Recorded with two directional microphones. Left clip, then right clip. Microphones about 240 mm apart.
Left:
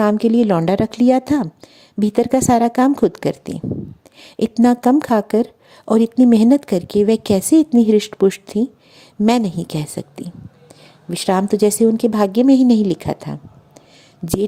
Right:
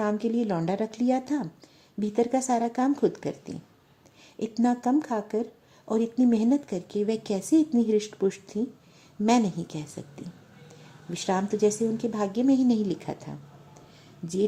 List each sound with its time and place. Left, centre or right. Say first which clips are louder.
0.0 s speech: left 12 dB; left